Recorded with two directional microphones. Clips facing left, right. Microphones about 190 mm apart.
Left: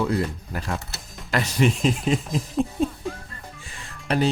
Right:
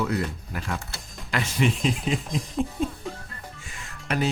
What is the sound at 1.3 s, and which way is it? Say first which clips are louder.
Speech: left 3 dB; 40° left (ahead or behind).